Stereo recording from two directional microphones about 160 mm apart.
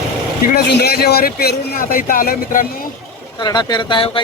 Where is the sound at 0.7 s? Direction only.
80° left; by 2.9 s 65° left (ahead or behind).